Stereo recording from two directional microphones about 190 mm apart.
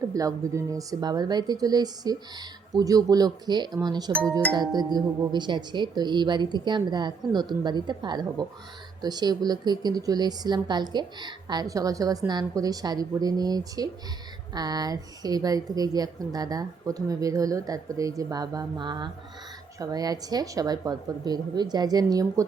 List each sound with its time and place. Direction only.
0.1 s speech: 20° right (ahead or behind)